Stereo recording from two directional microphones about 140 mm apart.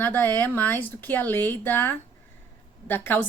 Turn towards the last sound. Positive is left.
turn(degrees=15)  # may be behind; listen again after turning